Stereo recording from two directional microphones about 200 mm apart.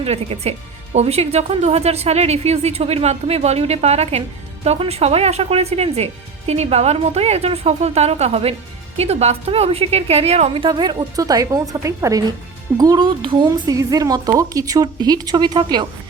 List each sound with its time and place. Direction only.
0.0 s a woman's voice: 30° right (ahead or behind)